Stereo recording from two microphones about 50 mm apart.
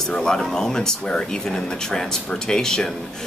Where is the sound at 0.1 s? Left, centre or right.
Centre.